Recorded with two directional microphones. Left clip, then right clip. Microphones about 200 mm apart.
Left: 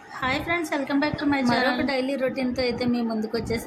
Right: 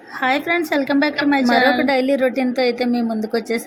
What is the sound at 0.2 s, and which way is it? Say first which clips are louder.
A woman's voice: right 7 dB; 20° right (ahead or behind).